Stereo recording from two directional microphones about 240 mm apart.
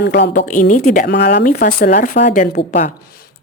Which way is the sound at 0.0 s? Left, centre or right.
Left.